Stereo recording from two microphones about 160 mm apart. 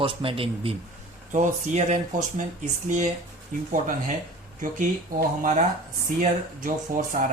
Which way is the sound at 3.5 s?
55° right (ahead or behind).